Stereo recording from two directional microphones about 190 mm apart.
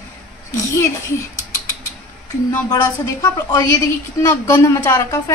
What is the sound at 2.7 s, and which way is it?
A woman's voice, 15° left (ahead or behind).